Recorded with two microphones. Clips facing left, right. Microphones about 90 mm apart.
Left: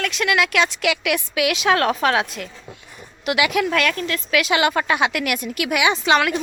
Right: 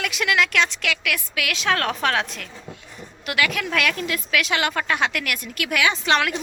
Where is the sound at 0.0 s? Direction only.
5° right (ahead or behind); by 3.8 s 10° left (ahead or behind).